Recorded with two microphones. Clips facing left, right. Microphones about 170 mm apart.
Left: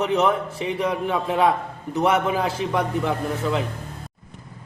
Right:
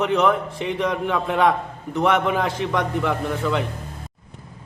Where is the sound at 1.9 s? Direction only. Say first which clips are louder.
Right 1 dB; 5° left (ahead or behind).